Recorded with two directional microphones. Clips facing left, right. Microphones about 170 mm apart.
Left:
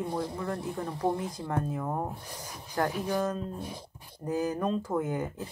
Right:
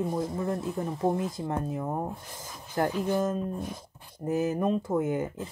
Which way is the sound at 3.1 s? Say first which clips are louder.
Right 3 dB; 25° right (ahead or behind).